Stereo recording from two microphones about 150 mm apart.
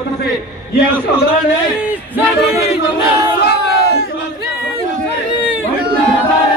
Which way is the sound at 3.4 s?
90° left.